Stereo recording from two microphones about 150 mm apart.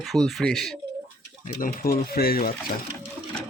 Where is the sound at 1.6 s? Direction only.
75° left (ahead or behind); by 2.5 s 90° left.